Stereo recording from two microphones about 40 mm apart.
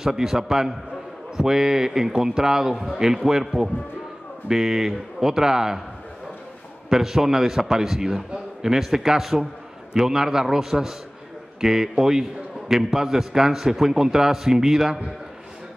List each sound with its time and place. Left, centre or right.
0.0 s a man's voice: centre
6.9 s a man's voice: centre